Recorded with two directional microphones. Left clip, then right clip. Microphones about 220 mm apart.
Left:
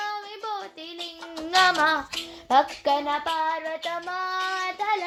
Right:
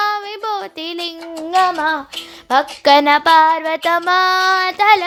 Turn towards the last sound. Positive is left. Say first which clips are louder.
# right 14 dB
turn(degrees=-50)  # may be behind; listen again after turning